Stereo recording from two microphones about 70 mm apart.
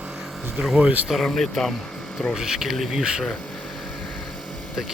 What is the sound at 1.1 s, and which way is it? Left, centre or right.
Speech, centre.